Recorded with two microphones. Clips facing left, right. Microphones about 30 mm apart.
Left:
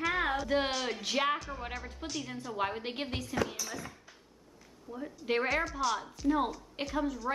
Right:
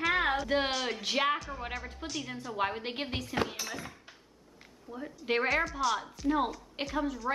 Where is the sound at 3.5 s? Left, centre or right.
Right.